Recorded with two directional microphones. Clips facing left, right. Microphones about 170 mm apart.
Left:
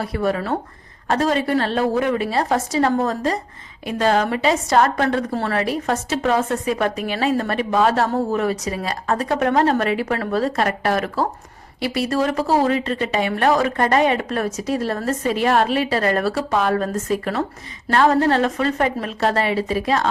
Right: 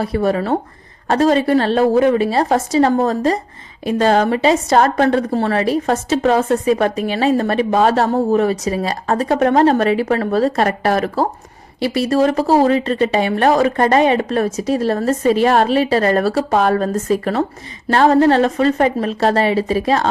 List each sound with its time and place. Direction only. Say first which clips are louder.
0.0 s a woman's voice: right 5 dB; 30° right (ahead or behind)